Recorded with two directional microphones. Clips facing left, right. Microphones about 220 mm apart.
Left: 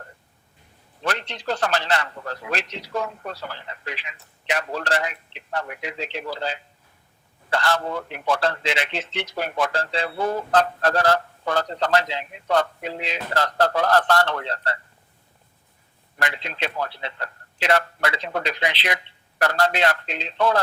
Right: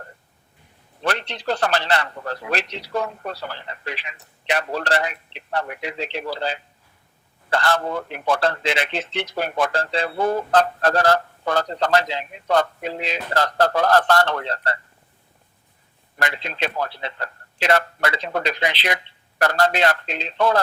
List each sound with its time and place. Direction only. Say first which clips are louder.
1.0 s a sound: right 3 dB; 65° right (ahead or behind)
1.5 s a man's voice: right 2 dB; 60° right (ahead or behind)
3.3 s a man's voice: right 2 dB; 35° right (ahead or behind)
4.5 s a man's voice: right 2 dB; 65° right (ahead or behind)
7.5 s a man's voice: right 2 dB; 55° right (ahead or behind)
16.1 s a man's voice: right 2 dB; 40° right (ahead or behind)